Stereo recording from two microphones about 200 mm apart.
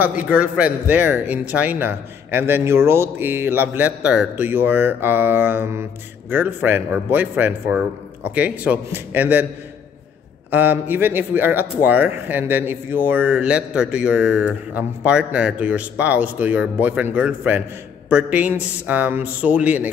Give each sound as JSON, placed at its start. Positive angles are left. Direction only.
{"t": 0.0, "sound": "a man's voice", "side_deg": -5}
{"t": 10.5, "sound": "a man's voice", "side_deg": -10}